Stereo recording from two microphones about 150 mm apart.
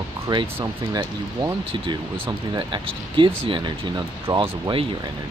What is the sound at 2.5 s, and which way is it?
Speech, 30° right (ahead or behind).